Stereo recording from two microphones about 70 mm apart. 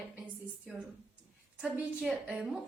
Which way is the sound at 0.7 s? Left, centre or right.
Centre.